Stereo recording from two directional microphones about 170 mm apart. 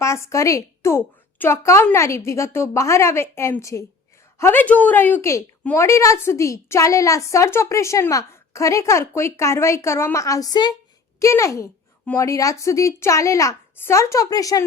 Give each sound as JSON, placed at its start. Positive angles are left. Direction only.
{"t": 0.0, "sound": "a woman's voice", "side_deg": 15}